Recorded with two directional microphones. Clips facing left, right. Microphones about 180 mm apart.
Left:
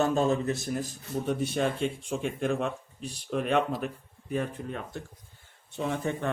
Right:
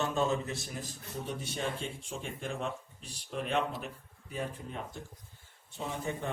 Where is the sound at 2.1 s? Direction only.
65° left (ahead or behind).